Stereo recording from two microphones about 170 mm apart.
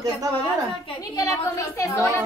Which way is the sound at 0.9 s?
20° left (ahead or behind).